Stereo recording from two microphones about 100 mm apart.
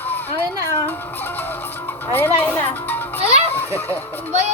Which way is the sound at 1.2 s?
20° left (ahead or behind).